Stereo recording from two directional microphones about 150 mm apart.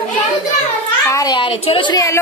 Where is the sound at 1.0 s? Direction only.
25° left (ahead or behind).